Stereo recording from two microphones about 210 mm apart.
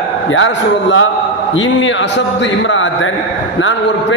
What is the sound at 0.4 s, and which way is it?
Speech, 65° left (ahead or behind).